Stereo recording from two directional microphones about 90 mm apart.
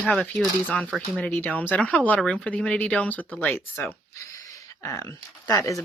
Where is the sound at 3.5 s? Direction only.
25° left (ahead or behind).